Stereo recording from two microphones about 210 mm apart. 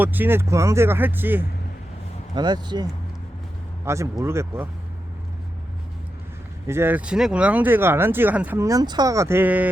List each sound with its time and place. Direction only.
0.0 s speech: 10° right (ahead or behind)
2.3 s speech: 20° right (ahead or behind)
3.8 s speech: 15° right (ahead or behind)
6.7 s speech: 10° right (ahead or behind)